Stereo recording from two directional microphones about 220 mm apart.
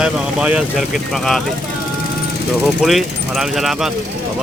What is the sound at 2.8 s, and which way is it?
Speech, centre (ahead or behind).